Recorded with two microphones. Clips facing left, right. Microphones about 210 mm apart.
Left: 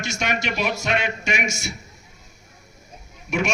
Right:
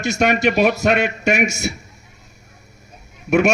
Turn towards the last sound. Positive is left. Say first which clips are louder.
# right 9 dB
turn(degrees=-60)  # may be behind; listen again after turning